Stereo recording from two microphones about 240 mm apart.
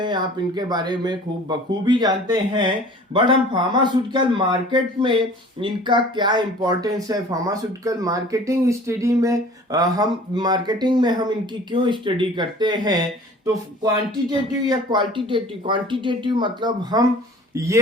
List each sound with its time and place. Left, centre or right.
0.0 s speech: centre